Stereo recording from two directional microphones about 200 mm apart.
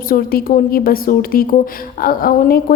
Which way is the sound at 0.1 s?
45° left (ahead or behind).